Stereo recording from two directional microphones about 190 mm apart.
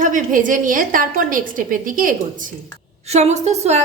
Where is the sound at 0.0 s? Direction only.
45° right (ahead or behind).